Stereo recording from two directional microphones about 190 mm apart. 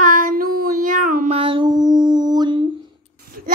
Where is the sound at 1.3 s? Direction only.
25° right (ahead or behind).